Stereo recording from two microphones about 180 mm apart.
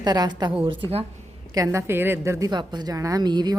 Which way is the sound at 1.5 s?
15° right (ahead or behind).